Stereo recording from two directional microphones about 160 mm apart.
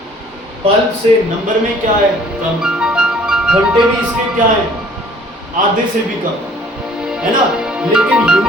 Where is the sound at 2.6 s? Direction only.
5° right (ahead or behind).